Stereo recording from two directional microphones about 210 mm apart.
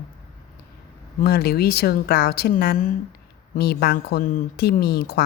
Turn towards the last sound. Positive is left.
turn(degrees=50)  # may be behind; listen again after turning